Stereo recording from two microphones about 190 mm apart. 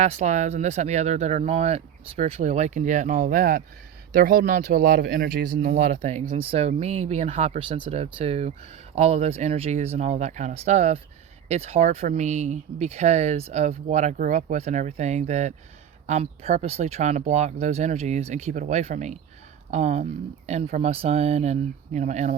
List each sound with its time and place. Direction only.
0.0 s speech: 35° right (ahead or behind)